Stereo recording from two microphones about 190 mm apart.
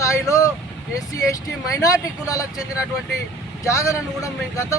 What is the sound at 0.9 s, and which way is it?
A man's voice, 20° left (ahead or behind).